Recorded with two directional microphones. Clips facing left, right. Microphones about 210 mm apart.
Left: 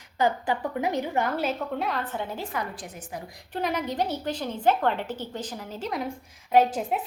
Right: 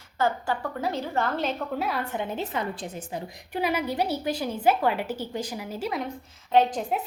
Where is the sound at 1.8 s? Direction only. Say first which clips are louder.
Right 1 dB; 10° right (ahead or behind); by 3.2 s 25° right (ahead or behind).